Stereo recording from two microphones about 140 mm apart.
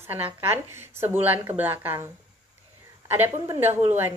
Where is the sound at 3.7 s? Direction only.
50° right (ahead or behind).